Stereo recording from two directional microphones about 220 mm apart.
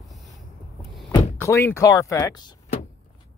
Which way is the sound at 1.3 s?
10° left (ahead or behind).